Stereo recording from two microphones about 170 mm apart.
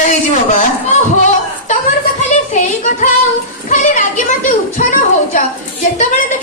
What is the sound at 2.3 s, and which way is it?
Child singing, 45° left (ahead or behind).